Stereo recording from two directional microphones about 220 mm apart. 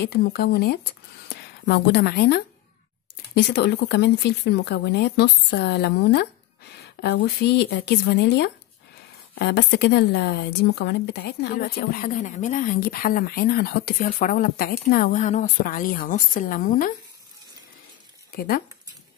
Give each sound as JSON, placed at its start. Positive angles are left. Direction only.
{"t": 0.0, "sound": "speech", "side_deg": 45}
{"t": 7.5, "sound": "speech", "side_deg": 50}